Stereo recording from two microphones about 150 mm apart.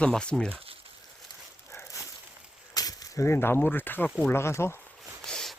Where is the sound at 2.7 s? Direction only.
25° left (ahead or behind).